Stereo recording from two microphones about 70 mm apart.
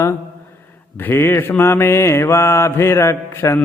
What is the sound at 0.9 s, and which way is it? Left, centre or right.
Mantra, left.